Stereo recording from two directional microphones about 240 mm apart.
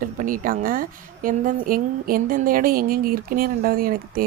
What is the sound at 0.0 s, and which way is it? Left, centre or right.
Speech, right.